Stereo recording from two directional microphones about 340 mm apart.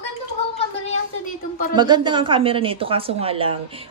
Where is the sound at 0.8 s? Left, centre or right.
Left.